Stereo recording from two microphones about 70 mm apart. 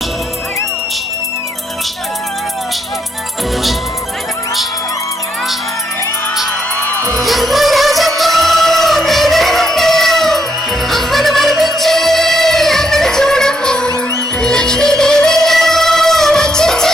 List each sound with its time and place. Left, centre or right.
6.7 s music: left
7.2 s music: centre